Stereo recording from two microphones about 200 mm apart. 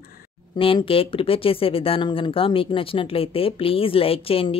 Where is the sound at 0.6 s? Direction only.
25° left (ahead or behind).